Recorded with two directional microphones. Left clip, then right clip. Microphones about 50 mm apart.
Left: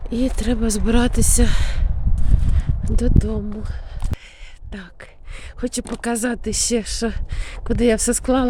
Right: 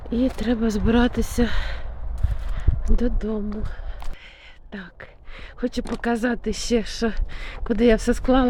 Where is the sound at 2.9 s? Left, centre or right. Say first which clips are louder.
Left 2 dB; left.